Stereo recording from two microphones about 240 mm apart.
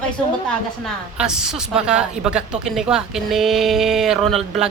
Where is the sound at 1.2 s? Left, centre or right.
Centre.